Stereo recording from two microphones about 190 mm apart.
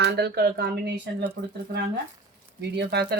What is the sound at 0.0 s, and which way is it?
Speech, 60° right (ahead or behind).